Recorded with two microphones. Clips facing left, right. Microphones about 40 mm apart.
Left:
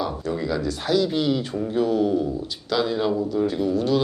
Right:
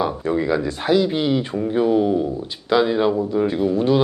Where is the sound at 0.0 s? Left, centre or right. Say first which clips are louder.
Right 5 dB; right.